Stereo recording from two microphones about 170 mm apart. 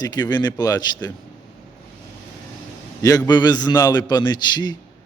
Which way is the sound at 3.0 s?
20° left (ahead or behind).